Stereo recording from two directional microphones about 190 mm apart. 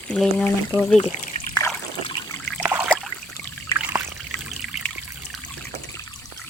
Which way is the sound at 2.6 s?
10° right (ahead or behind).